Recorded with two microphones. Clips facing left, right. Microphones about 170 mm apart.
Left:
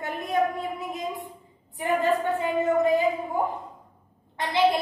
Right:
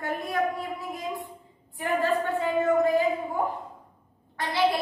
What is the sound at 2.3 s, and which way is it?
Speech, 20° left (ahead or behind).